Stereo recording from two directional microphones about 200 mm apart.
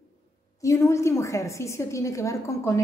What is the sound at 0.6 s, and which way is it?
A woman's voice, 15° left (ahead or behind).